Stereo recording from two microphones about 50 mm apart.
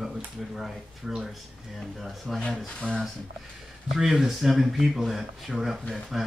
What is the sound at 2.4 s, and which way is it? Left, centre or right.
Speech, left.